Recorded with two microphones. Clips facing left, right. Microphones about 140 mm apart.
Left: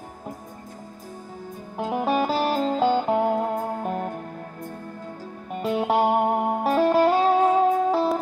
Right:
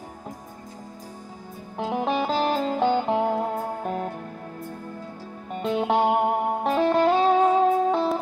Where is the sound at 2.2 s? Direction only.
Centre (ahead or behind).